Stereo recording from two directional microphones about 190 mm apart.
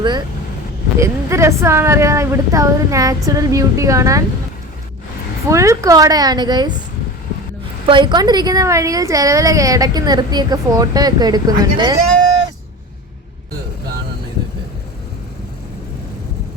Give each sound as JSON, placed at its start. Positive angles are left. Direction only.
{"t": 0.9, "sound": "a woman's voice", "side_deg": -15}
{"t": 5.5, "sound": "a woman's voice", "side_deg": -15}
{"t": 7.9, "sound": "a woman's voice", "side_deg": -25}